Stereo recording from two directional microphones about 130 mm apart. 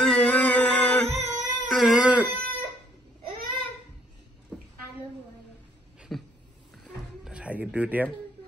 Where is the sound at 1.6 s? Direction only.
Centre (ahead or behind).